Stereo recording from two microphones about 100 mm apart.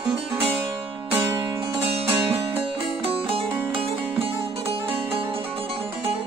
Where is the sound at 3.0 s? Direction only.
70° right (ahead or behind).